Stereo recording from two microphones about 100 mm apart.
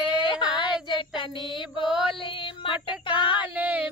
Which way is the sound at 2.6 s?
55° left (ahead or behind).